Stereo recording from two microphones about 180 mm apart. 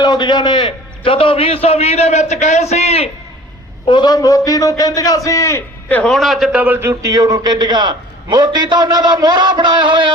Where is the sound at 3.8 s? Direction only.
25° left (ahead or behind).